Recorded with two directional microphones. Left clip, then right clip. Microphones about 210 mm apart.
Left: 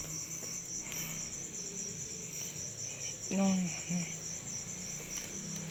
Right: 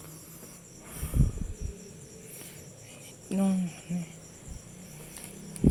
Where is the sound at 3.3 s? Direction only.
30° right (ahead or behind).